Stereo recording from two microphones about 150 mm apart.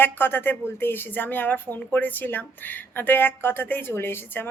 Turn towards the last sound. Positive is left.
turn(degrees=15)  # may be behind; listen again after turning